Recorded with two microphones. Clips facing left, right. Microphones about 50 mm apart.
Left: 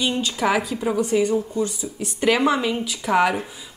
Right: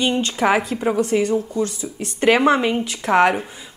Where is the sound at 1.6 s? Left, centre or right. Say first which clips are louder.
Right 1 dB; right.